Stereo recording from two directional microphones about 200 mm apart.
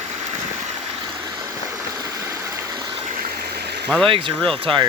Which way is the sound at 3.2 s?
55° right (ahead or behind).